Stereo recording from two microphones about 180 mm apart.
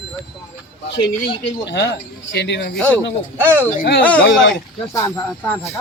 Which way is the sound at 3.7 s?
65° left (ahead or behind).